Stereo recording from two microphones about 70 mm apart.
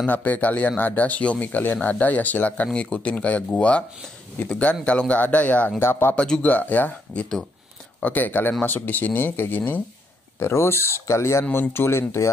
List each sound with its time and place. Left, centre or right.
0.0 s speech: left
5.8 s speech: left
6.1 s speech: centre
6.4 s speech: left